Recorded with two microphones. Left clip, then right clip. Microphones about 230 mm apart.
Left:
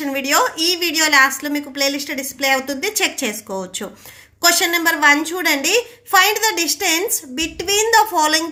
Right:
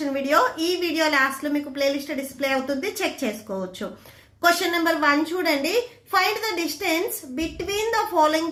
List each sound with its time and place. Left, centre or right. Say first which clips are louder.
0.0 s a woman's voice: left 3 dB; left